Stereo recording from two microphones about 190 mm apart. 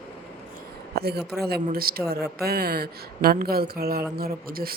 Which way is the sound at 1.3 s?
55° right (ahead or behind).